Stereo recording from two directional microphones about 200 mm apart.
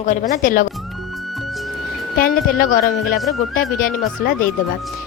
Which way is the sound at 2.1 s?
45° left (ahead or behind).